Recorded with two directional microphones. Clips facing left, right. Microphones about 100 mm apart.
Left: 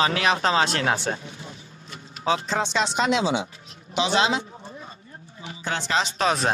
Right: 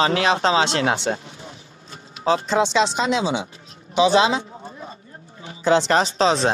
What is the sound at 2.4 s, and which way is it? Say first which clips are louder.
Speech: right 6 dB; 75° right (ahead or behind).